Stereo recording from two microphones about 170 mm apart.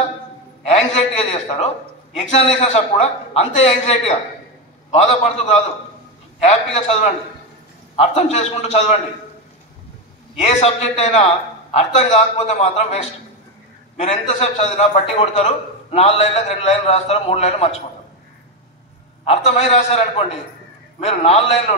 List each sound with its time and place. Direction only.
1.3 s a man's voice: 40° left (ahead or behind)
10.3 s a man's voice: 40° left (ahead or behind)
14.0 s a man's voice: 40° left (ahead or behind)
19.2 s a man's voice: 35° left (ahead or behind)